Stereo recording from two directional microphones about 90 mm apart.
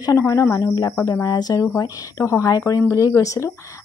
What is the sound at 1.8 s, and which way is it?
Speech, 35° left (ahead or behind).